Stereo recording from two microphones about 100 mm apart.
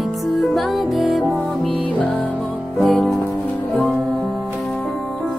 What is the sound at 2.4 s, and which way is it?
Music, centre (ahead or behind).